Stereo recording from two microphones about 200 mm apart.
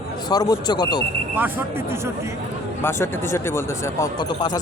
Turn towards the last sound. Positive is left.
turn(degrees=20)  # may be behind; listen again after turning